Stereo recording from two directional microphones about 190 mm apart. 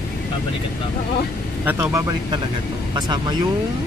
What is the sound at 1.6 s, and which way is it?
Speech, 10° right (ahead or behind).